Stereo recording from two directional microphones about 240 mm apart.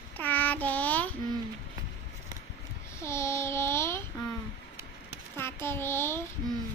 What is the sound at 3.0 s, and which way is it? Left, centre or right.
Child singing, centre.